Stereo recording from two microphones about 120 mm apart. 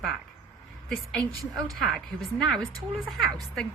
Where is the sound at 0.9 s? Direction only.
5° left (ahead or behind).